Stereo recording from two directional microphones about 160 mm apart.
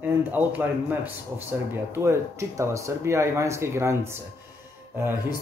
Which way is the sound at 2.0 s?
15° right (ahead or behind).